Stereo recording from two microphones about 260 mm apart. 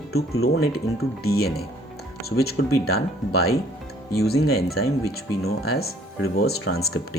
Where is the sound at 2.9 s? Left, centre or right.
Left.